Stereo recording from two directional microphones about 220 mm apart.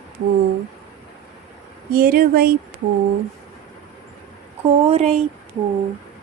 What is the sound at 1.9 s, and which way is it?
Speech, 40° right (ahead or behind).